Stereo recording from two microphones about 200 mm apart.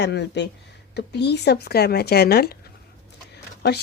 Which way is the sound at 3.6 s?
55° left (ahead or behind).